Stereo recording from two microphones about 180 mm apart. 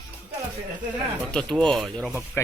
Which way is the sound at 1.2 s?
5° left (ahead or behind).